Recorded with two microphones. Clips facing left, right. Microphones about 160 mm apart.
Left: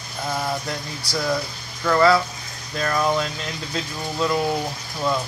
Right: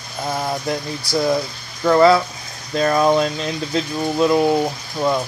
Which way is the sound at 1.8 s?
25° right (ahead or behind).